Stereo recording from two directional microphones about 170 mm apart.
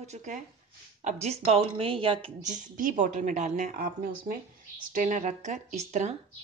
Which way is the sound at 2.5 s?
50° right (ahead or behind).